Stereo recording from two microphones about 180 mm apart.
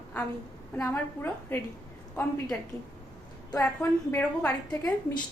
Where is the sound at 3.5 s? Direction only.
10° left (ahead or behind).